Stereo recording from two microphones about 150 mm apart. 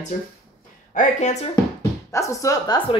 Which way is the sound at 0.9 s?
50° left (ahead or behind).